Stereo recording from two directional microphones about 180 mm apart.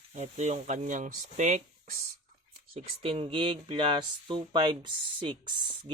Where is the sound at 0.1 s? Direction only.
40° right (ahead or behind).